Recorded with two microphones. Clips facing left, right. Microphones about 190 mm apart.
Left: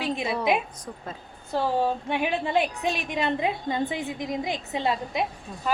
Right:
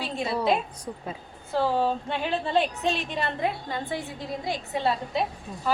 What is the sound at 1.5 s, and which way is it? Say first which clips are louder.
A woman's voice: even; 15° left (ahead or behind).